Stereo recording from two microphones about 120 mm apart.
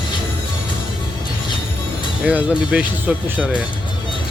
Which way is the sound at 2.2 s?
10° right (ahead or behind).